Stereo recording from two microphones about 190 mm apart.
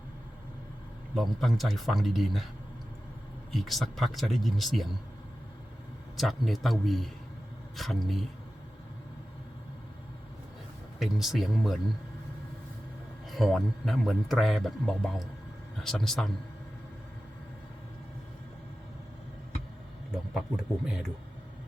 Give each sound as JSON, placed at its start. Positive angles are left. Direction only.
{"t": 1.1, "sound": "a man's voice", "side_deg": 0}
{"t": 3.5, "sound": "a man's voice", "side_deg": 0}
{"t": 6.1, "sound": "a man's voice", "side_deg": 0}
{"t": 11.0, "sound": "a man's voice", "side_deg": 0}
{"t": 13.3, "sound": "a man's voice", "side_deg": 0}
{"t": 20.8, "sound": "a man's voice", "side_deg": -5}